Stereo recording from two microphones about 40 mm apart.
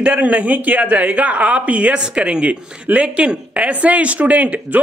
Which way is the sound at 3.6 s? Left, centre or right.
Right.